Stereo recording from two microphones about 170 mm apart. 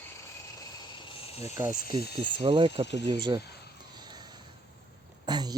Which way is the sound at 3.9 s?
25° right (ahead or behind).